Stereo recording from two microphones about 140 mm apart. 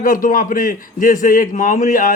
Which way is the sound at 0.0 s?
80° left.